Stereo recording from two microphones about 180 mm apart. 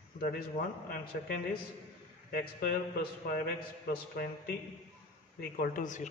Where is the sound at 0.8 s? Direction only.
55° left (ahead or behind).